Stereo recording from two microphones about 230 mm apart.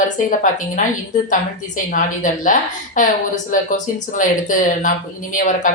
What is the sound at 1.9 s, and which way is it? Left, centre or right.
A woman's voice, left.